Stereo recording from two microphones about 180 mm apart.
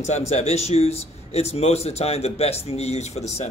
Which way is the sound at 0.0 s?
40° left (ahead or behind).